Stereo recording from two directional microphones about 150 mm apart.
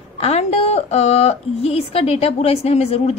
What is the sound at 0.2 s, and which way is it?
A woman's voice, 45° left (ahead or behind).